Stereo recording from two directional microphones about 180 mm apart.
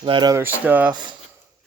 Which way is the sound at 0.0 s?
25° right (ahead or behind).